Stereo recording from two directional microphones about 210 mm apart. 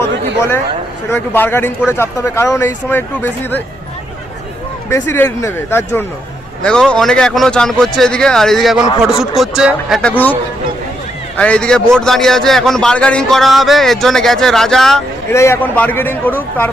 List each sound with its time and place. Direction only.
1.1 s speech: 10° left (ahead or behind)
4.9 s speech: 10° left (ahead or behind)
11.3 s speech: 5° left (ahead or behind)
15.3 s speech: 10° left (ahead or behind)